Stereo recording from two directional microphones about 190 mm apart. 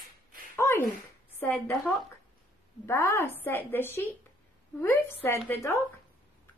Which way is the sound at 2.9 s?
15° left (ahead or behind).